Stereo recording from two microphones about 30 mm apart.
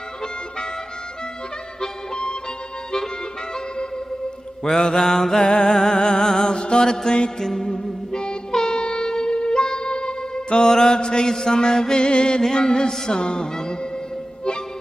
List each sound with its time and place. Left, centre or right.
4.6 s music: centre
6.5 s mantra: left
6.9 s music: centre
8.5 s music: centre
8.7 s wind instrument: left
9.8 s music: left
10.7 s music: centre
11.0 s mantra: left
12.4 s music: centre